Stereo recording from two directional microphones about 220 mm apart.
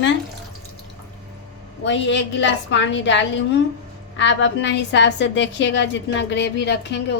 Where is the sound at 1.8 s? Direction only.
55° left (ahead or behind).